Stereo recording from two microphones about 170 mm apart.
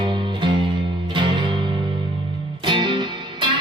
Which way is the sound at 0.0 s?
30° right (ahead or behind).